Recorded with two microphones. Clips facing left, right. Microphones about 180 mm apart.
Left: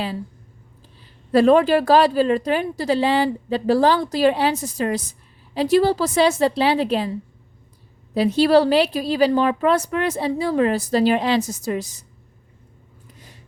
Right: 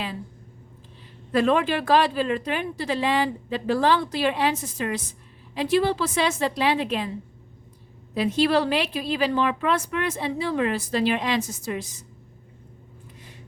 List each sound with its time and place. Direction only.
1.3 s a woman's voice: 35° left (ahead or behind)
8.1 s a woman's voice: 35° left (ahead or behind)